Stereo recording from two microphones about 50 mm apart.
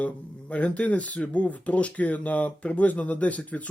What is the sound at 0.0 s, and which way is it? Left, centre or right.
Speech, left.